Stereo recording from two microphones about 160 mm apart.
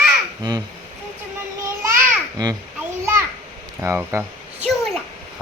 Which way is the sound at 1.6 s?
20° right (ahead or behind).